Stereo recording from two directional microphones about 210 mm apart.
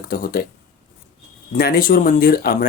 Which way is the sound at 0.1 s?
45° left (ahead or behind).